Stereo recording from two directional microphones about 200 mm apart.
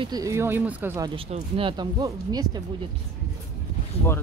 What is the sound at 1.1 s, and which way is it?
Speech, 25° right (ahead or behind).